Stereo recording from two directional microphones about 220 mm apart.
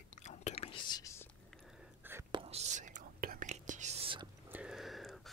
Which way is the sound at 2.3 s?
25° right (ahead or behind).